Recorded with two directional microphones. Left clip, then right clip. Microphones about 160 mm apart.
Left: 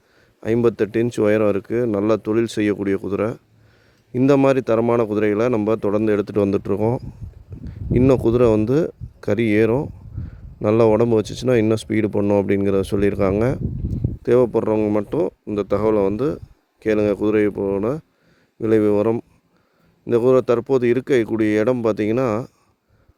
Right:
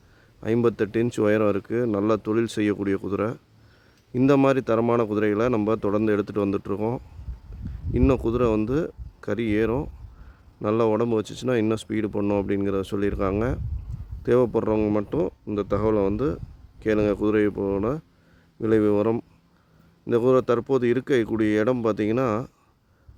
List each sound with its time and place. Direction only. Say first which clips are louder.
0.3 s speech: left 4 dB; 30° left (ahead or behind)